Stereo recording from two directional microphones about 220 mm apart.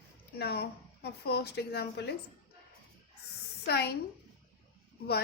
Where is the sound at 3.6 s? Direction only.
50° left (ahead or behind).